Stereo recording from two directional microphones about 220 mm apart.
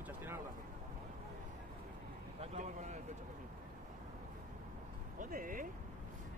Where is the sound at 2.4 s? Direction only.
30° right (ahead or behind).